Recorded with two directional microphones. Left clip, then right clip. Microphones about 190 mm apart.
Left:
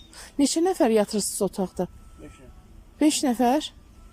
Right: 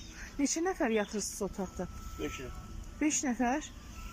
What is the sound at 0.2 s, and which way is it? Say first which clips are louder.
Speech: left 10 dB; 30° left (ahead or behind).